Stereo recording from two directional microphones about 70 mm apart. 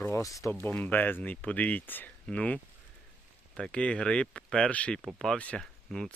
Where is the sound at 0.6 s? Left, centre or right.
Left; by 5.4 s centre.